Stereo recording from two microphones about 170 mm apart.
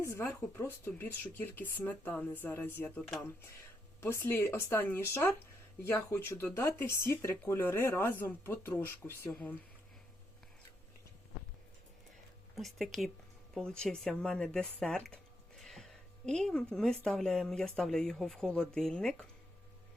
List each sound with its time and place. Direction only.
0.0 s speech: 15° left (ahead or behind)
12.5 s speech: centre (ahead or behind)
15.6 s a sound: centre (ahead or behind)
17.0 s speech: 5° left (ahead or behind)